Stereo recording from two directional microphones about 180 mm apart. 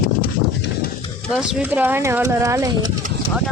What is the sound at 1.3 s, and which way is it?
Speech, 5° right (ahead or behind).